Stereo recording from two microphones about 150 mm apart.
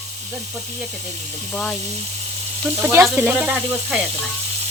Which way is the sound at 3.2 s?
10° right (ahead or behind).